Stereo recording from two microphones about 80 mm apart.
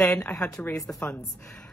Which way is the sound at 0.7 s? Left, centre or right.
Left.